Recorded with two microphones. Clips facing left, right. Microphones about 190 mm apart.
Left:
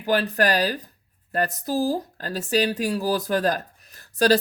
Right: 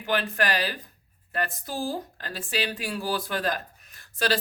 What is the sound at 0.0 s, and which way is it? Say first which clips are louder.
Speech: left 5 dB; 40° left (ahead or behind).